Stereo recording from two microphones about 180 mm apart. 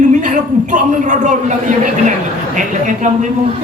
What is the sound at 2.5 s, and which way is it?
Speech, 45° right (ahead or behind).